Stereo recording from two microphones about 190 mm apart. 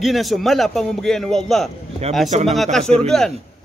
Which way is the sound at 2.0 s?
35° right (ahead or behind).